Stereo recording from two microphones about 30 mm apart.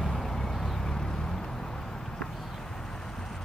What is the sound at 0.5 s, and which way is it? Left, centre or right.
Vehicle, centre.